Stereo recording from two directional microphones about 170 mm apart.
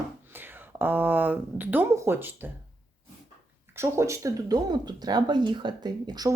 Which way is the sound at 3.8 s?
15° right (ahead or behind).